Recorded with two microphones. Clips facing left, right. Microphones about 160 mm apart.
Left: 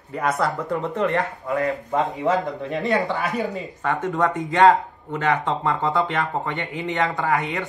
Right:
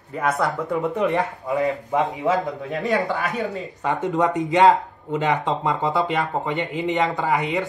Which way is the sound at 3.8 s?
20° right (ahead or behind).